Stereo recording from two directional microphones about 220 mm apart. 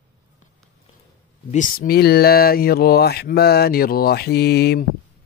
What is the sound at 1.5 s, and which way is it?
Speech, 40° left (ahead or behind).